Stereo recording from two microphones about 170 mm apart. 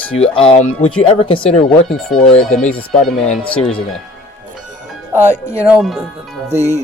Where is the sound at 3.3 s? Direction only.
5° left (ahead or behind).